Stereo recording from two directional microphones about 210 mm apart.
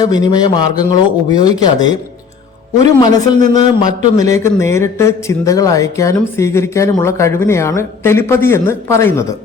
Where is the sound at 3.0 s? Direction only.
20° left (ahead or behind).